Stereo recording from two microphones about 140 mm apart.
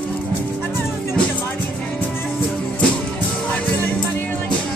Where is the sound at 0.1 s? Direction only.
15° left (ahead or behind).